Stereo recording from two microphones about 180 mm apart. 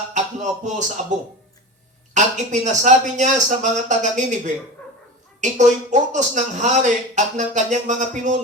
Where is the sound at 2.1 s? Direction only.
40° right (ahead or behind).